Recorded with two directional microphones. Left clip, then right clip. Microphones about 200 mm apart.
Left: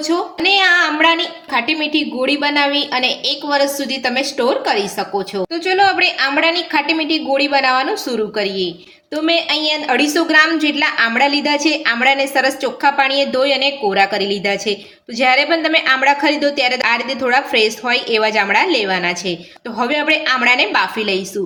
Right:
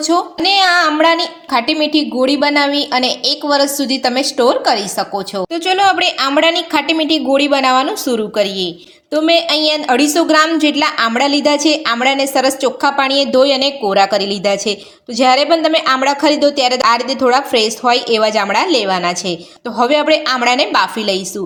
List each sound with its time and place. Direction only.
0.4 s a woman's voice: 40° right (ahead or behind)